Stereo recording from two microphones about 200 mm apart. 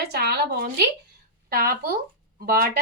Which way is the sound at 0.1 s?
50° right (ahead or behind).